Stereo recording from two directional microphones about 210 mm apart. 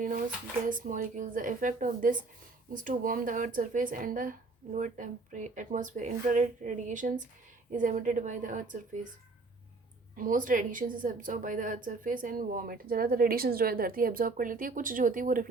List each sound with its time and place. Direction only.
0.7 s a woman's voice: 40° right (ahead or behind)
10.2 s a woman's voice: 40° right (ahead or behind)